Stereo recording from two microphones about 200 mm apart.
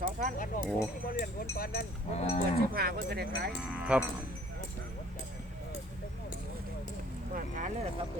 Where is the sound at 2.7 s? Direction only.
50° right (ahead or behind).